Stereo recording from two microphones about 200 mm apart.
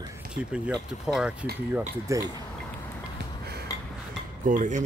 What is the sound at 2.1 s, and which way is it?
Speech, 15° right (ahead or behind).